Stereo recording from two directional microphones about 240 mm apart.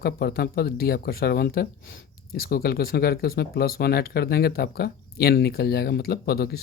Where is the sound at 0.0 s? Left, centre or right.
Left.